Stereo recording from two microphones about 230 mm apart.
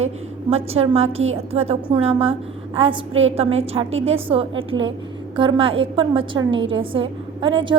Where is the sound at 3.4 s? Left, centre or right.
Right.